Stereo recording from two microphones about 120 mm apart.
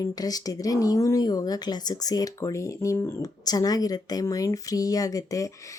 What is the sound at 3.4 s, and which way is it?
Speech, 35° left (ahead or behind).